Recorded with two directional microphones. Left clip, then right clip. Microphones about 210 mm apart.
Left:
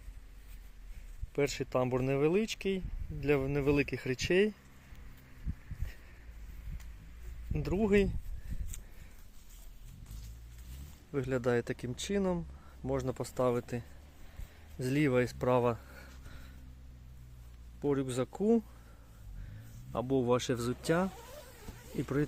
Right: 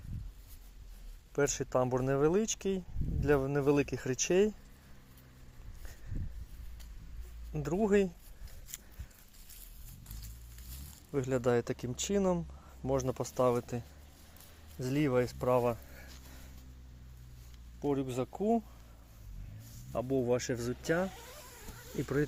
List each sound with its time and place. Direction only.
1.3 s speech: 5° left (ahead or behind)
7.5 s speech: 5° left (ahead or behind)
11.1 s speech: centre (ahead or behind)
14.8 s speech: 15° left (ahead or behind)
17.7 s speech: 15° left (ahead or behind)
19.9 s speech: 15° left (ahead or behind)